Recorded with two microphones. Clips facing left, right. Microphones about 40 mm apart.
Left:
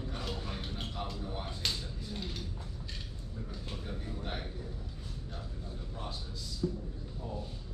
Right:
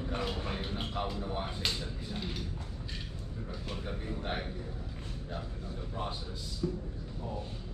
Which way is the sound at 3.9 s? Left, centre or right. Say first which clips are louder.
Right 4 dB; right.